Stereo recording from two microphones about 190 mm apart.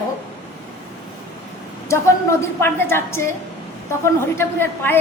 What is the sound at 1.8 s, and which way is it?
A woman's voice, 15° left (ahead or behind).